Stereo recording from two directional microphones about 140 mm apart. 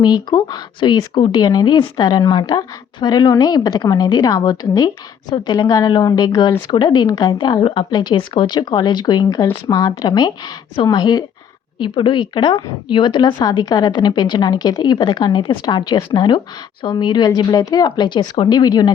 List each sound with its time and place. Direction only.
0.0 s a woman's voice: 30° left (ahead or behind)